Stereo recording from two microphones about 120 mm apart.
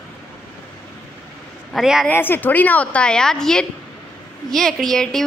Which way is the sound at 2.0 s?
15° left (ahead or behind).